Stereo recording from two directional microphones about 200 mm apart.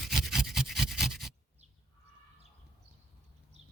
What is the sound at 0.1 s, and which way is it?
Rub, centre (ahead or behind).